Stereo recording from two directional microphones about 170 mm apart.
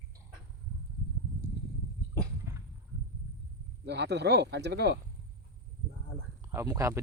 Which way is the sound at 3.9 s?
85° right.